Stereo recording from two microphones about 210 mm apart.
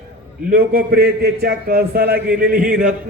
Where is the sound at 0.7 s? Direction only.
45° right (ahead or behind).